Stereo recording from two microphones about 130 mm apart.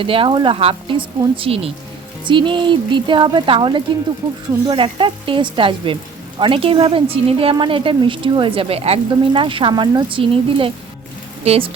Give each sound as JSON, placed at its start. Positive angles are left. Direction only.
{"t": 0.0, "sound": "a woman's voice", "side_deg": -45}